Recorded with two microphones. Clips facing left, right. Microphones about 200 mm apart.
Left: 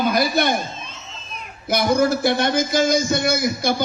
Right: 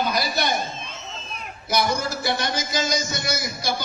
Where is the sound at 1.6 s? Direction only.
55° left (ahead or behind).